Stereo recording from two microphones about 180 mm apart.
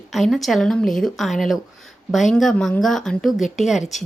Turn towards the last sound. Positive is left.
turn(degrees=0)  # may be behind; listen again after turning